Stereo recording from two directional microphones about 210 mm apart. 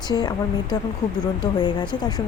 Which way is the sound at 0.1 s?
20° left (ahead or behind).